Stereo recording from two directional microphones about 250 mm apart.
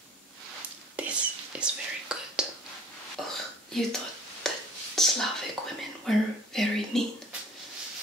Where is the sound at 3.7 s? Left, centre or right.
Centre.